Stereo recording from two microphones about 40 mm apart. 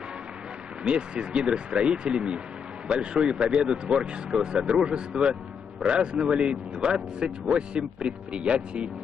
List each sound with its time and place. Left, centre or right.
0.8 s a man's voice: right